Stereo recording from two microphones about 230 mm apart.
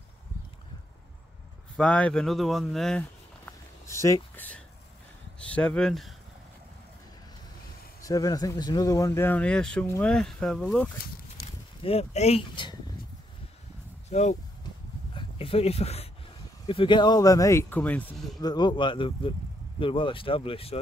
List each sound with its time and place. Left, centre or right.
1.8 s speech: centre
8.0 s speech: centre
11.8 s speech: left
14.0 s speech: left; by 18.4 s centre
18.4 s speech: centre